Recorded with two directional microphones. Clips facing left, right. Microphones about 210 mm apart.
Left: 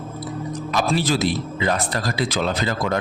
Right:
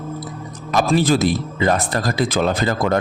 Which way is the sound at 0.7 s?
50° right (ahead or behind).